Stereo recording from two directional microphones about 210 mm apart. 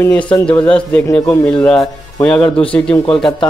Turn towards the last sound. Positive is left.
turn(degrees=5)  # may be behind; listen again after turning